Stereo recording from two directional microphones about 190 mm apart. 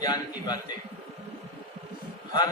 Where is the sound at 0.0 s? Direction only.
20° left (ahead or behind).